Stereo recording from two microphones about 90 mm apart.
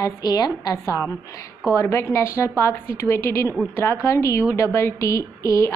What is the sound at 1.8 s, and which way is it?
A woman's voice, 30° left (ahead or behind).